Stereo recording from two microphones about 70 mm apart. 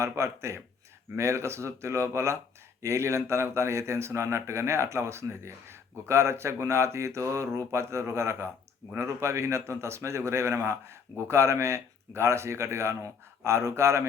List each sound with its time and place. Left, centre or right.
0.0 s speech: right